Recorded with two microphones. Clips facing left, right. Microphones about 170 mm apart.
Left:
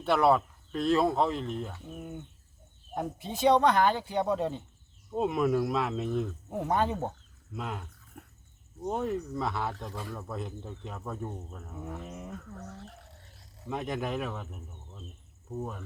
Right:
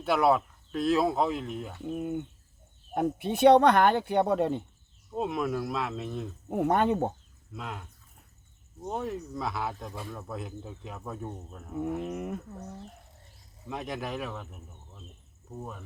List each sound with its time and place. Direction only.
0.0 s speech: 5° right (ahead or behind)
2.9 s speech: 65° right (ahead or behind)
5.1 s speech: centre (ahead or behind)
6.5 s speech: 60° right (ahead or behind)
7.5 s speech: centre (ahead or behind)
8.1 s a sound: 75° left (ahead or behind)
8.8 s speech: centre (ahead or behind)
11.8 s speech: 65° right (ahead or behind)
12.5 s speech: 20° right (ahead or behind)
13.7 s speech: centre (ahead or behind)